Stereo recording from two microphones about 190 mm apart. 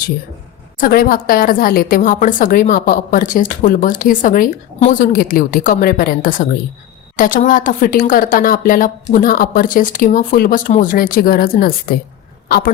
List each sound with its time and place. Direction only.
0.8 s a woman's voice: 50° left (ahead or behind)